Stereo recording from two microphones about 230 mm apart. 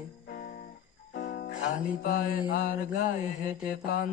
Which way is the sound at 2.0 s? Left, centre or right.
Left.